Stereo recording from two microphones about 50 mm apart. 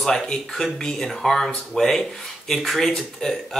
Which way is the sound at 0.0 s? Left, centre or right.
Centre.